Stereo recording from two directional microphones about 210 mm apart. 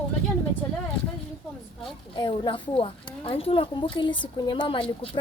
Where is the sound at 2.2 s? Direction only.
20° left (ahead or behind).